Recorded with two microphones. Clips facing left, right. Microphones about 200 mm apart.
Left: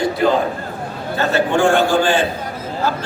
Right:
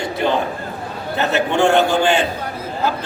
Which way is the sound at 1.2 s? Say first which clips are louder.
Left 1 dB; 20° right (ahead or behind).